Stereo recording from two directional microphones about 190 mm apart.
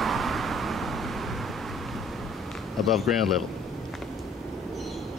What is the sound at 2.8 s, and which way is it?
Speech, centre (ahead or behind).